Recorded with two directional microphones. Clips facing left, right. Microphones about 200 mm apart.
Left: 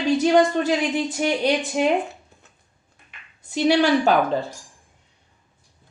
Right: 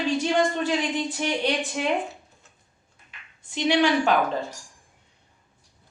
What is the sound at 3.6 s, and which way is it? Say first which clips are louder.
Speech: left 3 dB; 40° left (ahead or behind).